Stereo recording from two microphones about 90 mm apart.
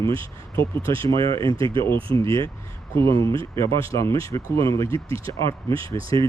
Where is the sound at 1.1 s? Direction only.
80° right.